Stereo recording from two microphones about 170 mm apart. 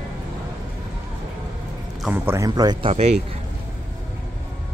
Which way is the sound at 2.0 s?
10° right (ahead or behind).